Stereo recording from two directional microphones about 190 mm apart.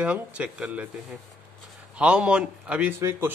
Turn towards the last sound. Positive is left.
turn(degrees=-10)  # may be behind; listen again after turning